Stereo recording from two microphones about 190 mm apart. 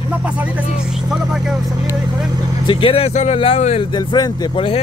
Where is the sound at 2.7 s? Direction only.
30° left (ahead or behind).